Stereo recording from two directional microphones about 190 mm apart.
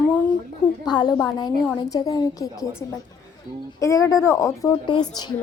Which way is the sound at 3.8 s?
15° left (ahead or behind).